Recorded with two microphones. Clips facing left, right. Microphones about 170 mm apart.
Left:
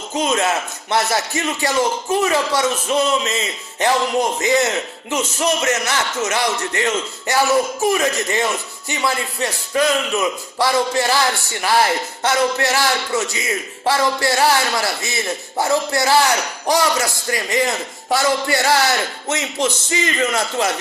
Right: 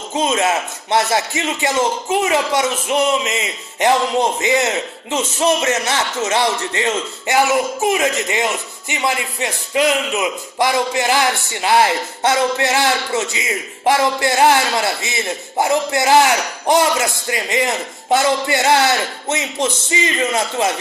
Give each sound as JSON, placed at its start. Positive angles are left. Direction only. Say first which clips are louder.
{"t": 0.2, "sound": "speech", "louder": "right 1 dB", "side_deg": -20}